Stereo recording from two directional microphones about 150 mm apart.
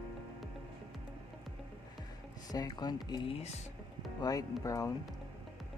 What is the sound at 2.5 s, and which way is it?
Speech, 25° left (ahead or behind).